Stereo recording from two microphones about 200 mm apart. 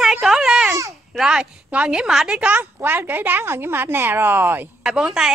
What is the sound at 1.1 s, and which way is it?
A woman's voice, 5° right (ahead or behind).